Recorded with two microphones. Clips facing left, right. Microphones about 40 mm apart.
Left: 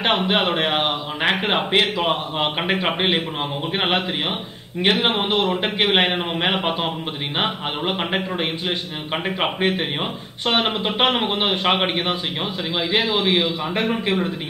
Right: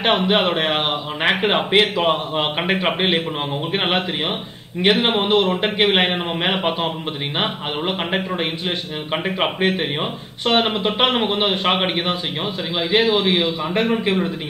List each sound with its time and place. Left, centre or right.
0.0 s a man's voice: centre
5.0 s a man's voice: centre